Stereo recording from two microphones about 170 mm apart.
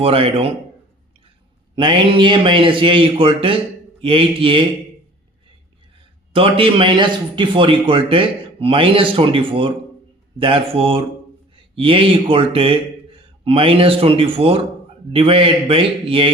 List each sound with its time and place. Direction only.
0.0 s a man's voice: 35° right (ahead or behind)
1.7 s a man's voice: 30° right (ahead or behind)
6.3 s a man's voice: 30° right (ahead or behind)